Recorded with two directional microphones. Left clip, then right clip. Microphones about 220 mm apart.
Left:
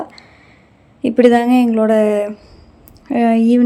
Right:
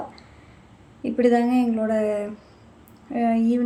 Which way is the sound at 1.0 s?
40° left (ahead or behind).